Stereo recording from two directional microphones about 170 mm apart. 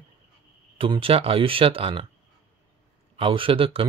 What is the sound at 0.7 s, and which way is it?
Speech, 30° right (ahead or behind).